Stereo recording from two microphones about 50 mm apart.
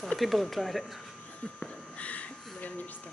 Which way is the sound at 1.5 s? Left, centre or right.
Left.